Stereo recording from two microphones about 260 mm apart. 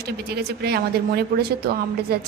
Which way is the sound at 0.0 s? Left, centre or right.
Right.